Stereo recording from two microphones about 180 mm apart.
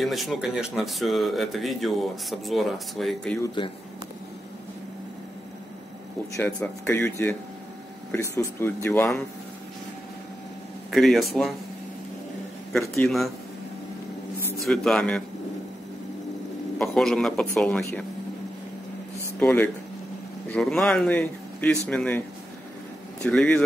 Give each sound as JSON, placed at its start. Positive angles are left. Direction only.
{"t": 0.0, "sound": "speech", "side_deg": 0}
{"t": 3.4, "sound": "speech", "side_deg": 25}
{"t": 6.3, "sound": "speech", "side_deg": 15}
{"t": 10.9, "sound": "speech", "side_deg": 0}
{"t": 13.0, "sound": "speech", "side_deg": 0}
{"t": 14.6, "sound": "speech", "side_deg": 0}
{"t": 16.7, "sound": "speech", "side_deg": 5}
{"t": 19.4, "sound": "speech", "side_deg": 10}
{"t": 23.2, "sound": "speech", "side_deg": 5}